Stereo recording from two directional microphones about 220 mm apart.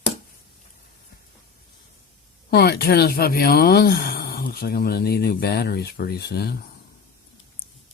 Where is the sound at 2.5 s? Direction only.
45° left (ahead or behind).